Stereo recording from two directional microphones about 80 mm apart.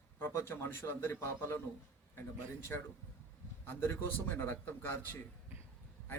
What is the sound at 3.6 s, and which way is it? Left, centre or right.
A man's voice, left.